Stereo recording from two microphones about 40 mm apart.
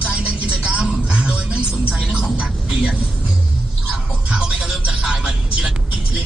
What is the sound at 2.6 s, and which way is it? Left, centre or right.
Vehicle, centre.